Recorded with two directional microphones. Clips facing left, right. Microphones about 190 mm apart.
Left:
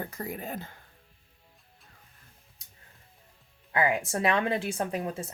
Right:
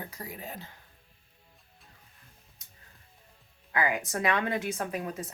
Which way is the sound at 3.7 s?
25° left (ahead or behind).